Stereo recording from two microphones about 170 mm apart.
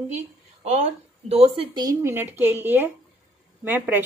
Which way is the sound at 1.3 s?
35° right (ahead or behind).